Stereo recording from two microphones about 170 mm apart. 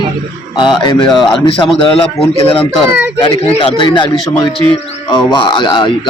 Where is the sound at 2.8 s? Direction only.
5° right (ahead or behind).